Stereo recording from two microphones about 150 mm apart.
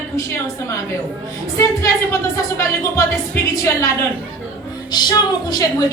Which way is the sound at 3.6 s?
20° left (ahead or behind).